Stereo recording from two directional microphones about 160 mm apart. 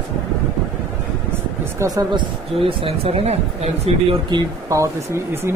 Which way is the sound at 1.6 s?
20° right (ahead or behind).